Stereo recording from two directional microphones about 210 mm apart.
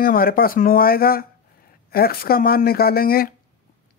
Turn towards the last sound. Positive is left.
turn(degrees=45)  # may be behind; listen again after turning